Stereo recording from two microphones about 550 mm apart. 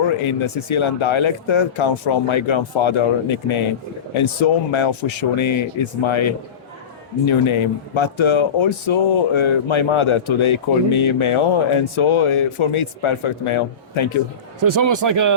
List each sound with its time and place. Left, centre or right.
0.3 s speech: left
14.6 s speech: right